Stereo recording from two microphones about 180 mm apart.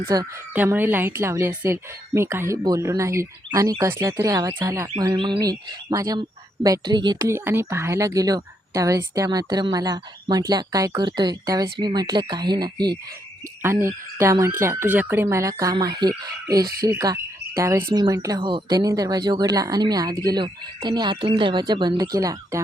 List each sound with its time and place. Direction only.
0.0 s a woman's voice: 20° right (ahead or behind)
0.5 s a woman's voice: 10° right (ahead or behind)
7.2 s a woman's voice: 15° right (ahead or behind)
16.8 s cricket: 20° right (ahead or behind)
17.9 s a woman's voice: 20° right (ahead or behind)